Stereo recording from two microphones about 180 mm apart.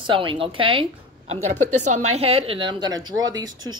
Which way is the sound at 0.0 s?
30° right (ahead or behind).